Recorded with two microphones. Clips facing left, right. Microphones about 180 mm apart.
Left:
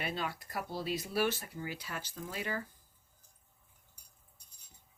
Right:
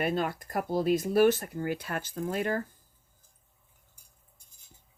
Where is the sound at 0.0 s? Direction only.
50° right (ahead or behind).